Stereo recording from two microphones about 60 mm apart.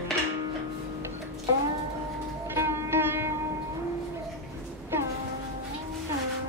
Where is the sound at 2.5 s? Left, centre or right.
Right.